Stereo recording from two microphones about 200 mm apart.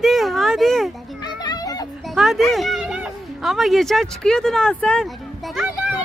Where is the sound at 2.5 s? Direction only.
Centre (ahead or behind).